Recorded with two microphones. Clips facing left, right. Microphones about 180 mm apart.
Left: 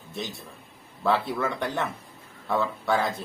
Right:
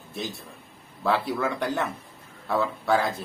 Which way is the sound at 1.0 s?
Centre (ahead or behind).